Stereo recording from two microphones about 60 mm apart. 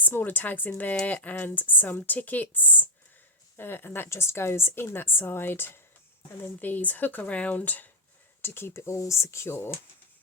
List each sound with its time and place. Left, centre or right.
0.0 s a woman's voice: left
8.4 s speech: left